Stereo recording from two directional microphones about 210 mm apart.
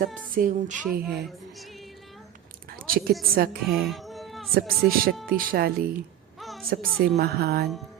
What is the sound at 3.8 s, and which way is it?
Child singing, centre (ahead or behind).